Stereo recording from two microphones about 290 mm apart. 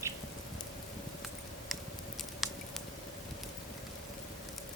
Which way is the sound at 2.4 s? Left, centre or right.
Centre.